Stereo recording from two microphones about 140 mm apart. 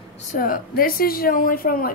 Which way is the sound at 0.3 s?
80° left.